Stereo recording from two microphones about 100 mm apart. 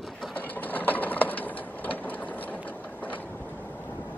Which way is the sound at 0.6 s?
15° left (ahead or behind).